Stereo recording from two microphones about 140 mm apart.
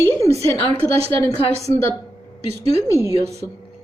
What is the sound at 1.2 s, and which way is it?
A woman's voice, 20° left (ahead or behind).